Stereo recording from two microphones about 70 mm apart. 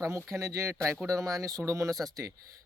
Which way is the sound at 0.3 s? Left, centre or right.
Right.